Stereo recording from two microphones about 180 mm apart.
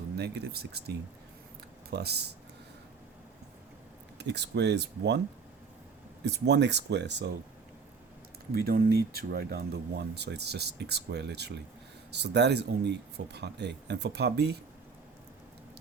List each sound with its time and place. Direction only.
0.2 s speech: 65° right (ahead or behind)
4.2 s speech: 70° right (ahead or behind)
6.2 s speech: 70° right (ahead or behind)
8.5 s speech: 60° right (ahead or behind)